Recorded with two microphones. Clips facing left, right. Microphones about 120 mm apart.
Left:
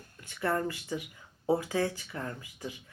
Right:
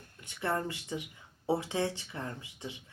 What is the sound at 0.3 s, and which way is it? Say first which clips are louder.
Speech: left 3 dB; 25° right (ahead or behind).